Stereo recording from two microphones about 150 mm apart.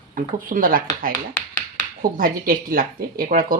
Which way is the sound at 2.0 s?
70° right (ahead or behind).